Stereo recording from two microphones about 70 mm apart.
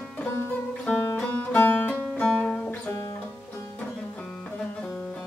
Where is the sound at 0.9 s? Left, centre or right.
Centre.